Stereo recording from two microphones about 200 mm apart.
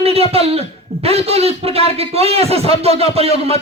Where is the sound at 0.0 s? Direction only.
30° right (ahead or behind).